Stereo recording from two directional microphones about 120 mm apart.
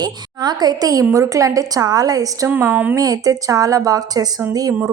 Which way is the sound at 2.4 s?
20° right (ahead or behind).